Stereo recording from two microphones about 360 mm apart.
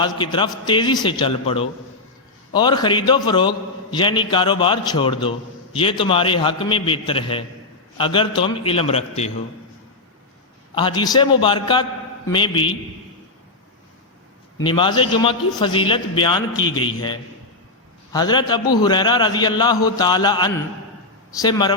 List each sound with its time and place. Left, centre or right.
0.0 s a man's voice: centre
10.8 s a man's voice: centre
14.6 s a man's voice: centre
16.6 s a man's voice: left
16.8 s a man's voice: centre